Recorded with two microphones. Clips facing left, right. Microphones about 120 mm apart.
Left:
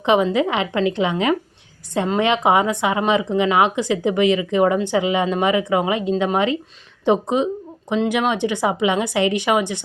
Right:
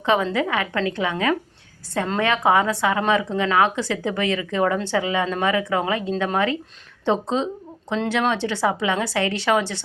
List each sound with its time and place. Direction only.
0.0 s a woman's voice: 20° left (ahead or behind)